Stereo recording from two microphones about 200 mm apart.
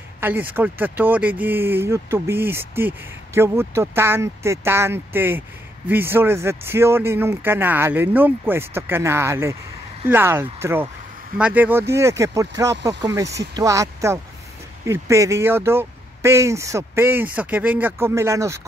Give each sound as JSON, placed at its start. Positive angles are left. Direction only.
{"t": 0.2, "sound": "speech", "side_deg": -10}